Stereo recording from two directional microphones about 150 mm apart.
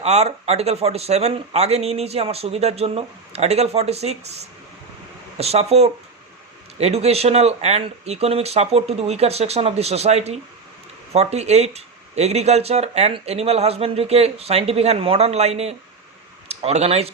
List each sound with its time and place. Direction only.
0.0 s speech: 45° right (ahead or behind)